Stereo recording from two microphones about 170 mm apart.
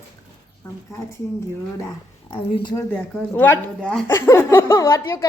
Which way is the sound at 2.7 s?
10° left (ahead or behind).